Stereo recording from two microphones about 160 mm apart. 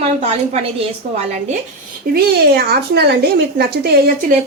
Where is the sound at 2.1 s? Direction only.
75° right (ahead or behind).